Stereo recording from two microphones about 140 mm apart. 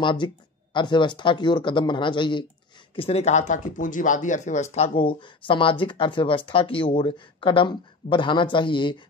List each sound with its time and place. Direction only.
0.0 s speech: 35° left (ahead or behind)
3.0 s speech: 45° left (ahead or behind)